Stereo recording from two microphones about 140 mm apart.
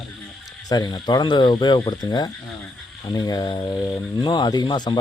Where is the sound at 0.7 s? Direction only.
30° left (ahead or behind).